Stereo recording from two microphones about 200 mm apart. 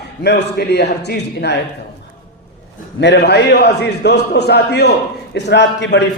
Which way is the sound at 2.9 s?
60° left (ahead or behind).